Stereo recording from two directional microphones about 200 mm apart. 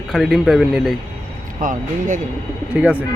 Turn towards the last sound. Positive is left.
turn(degrees=-5)  # may be behind; listen again after turning